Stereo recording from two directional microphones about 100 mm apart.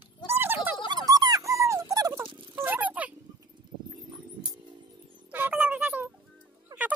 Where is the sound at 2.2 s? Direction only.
55° right (ahead or behind).